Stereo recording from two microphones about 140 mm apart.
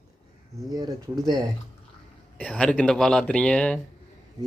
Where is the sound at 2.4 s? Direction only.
10° left (ahead or behind).